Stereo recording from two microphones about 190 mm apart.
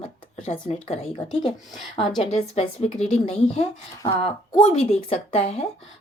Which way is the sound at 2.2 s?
35° left (ahead or behind).